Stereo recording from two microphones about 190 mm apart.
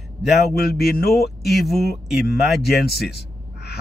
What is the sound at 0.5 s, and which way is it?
Mantra, 55° left (ahead or behind).